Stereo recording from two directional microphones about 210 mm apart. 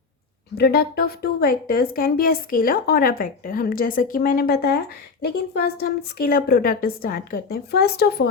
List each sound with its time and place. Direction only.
0.5 s a woman's voice: 50° left (ahead or behind)